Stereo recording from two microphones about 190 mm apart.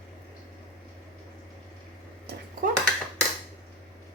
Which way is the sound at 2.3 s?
55° right (ahead or behind).